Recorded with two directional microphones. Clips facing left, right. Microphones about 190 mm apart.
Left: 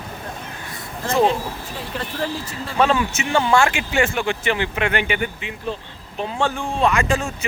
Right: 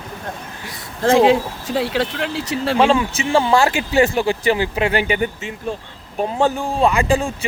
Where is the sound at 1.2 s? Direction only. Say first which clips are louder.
Right 6 dB; 90° right.